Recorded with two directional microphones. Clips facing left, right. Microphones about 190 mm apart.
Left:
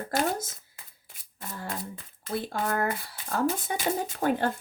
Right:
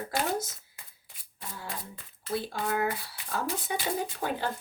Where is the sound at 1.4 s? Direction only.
45° left (ahead or behind).